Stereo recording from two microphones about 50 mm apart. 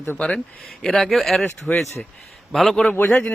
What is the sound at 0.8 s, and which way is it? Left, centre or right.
Speech, centre.